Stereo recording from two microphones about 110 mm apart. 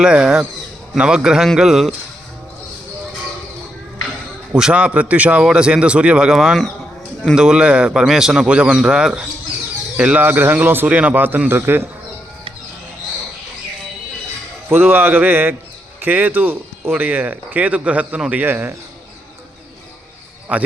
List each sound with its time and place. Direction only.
0.0 s a man's voice: 10° right (ahead or behind)
4.5 s speech: 10° right (ahead or behind)
14.7 s speech: 20° right (ahead or behind)
20.5 s speech: 15° right (ahead or behind)